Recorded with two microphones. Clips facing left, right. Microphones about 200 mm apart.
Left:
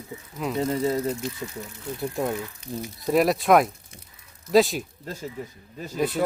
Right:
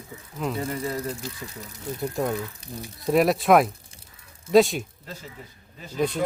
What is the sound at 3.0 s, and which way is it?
Speech, centre (ahead or behind).